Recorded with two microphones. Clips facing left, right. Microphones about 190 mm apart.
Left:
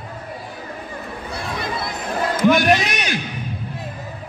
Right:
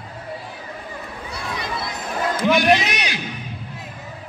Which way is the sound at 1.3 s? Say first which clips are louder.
Left 2 dB; 55° left (ahead or behind).